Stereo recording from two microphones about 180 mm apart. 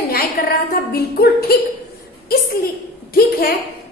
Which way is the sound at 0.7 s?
60° left (ahead or behind).